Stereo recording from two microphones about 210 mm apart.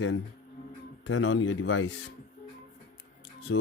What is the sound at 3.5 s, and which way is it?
Speech, 75° left (ahead or behind).